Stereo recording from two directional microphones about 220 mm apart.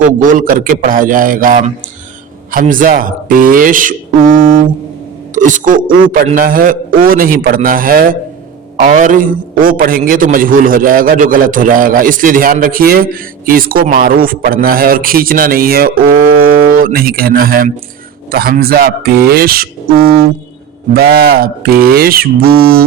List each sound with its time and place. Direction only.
0.2 s a man's voice: 35° right (ahead or behind)
18.3 s mantra: 45° right (ahead or behind)
20.9 s mantra: 45° right (ahead or behind)